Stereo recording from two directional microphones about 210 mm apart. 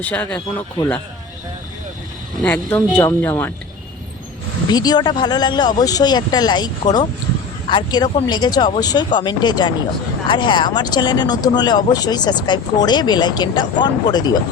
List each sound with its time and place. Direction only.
0.0 s speech: 5° left (ahead or behind)
2.4 s speech: 5° left (ahead or behind)
4.7 s speech: 20° left (ahead or behind)